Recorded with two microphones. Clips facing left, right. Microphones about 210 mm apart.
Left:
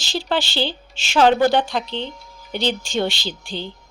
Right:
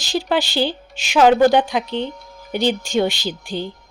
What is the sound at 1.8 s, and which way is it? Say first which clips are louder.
Speech: right 4 dB; 50° right (ahead or behind).